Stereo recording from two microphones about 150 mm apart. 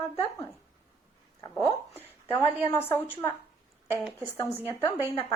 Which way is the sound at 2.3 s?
15° left (ahead or behind).